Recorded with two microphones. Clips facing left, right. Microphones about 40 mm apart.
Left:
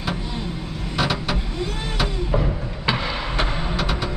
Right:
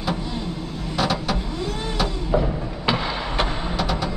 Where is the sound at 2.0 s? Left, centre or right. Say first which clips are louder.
Right 1 dB; centre.